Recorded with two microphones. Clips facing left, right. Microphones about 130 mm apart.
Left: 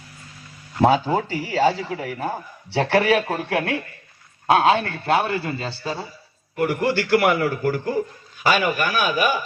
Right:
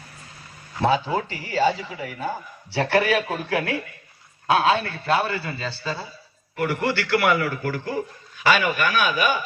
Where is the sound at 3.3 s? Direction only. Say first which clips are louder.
Left 2 dB; 70° left (ahead or behind).